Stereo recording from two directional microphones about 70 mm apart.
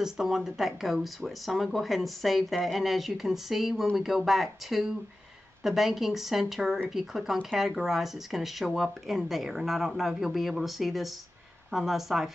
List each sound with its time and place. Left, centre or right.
0.0 s speech: centre